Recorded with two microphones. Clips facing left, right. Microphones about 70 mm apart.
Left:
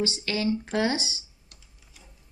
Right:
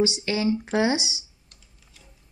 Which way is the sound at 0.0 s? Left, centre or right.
Centre.